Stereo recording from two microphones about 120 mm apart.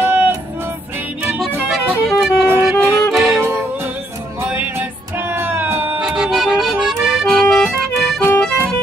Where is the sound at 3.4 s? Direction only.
20° right (ahead or behind).